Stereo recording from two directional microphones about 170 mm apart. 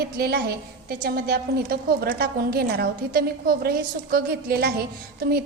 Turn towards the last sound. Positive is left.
turn(degrees=-65)  # may be behind; listen again after turning